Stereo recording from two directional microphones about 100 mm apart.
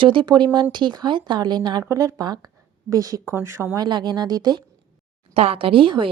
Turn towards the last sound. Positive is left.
turn(degrees=-60)  # may be behind; listen again after turning